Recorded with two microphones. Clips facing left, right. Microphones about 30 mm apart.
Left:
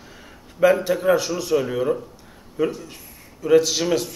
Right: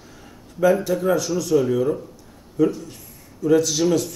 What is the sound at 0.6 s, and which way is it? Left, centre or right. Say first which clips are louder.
Speech: left 1 dB; left.